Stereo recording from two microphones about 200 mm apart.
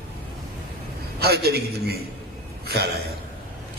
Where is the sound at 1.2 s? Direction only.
50° right (ahead or behind).